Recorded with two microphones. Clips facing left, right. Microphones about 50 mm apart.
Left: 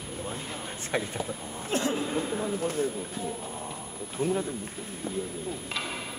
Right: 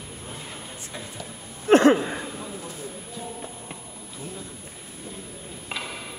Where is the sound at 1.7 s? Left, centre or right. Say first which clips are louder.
Right 14 dB; right.